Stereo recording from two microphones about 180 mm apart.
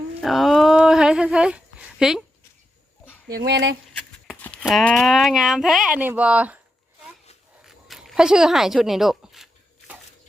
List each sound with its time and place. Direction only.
0.2 s a sound: centre (ahead or behind)
3.2 s speech: 65° right (ahead or behind); by 3.8 s 80° right
4.6 s speech: centre (ahead or behind)
7.6 s zipper: centre (ahead or behind)